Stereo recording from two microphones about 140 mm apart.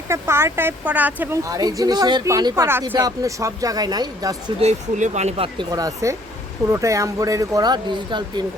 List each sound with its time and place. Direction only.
0.1 s speech: 20° right (ahead or behind)
1.5 s speech: 25° right (ahead or behind)
4.6 s speech: 55° right (ahead or behind)
5.5 s speech: 25° right (ahead or behind)